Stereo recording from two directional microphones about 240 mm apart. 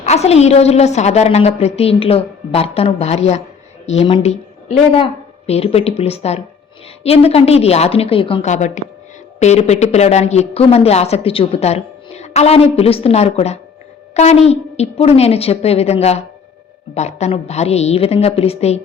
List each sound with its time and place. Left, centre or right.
0.0 s a woman's voice: left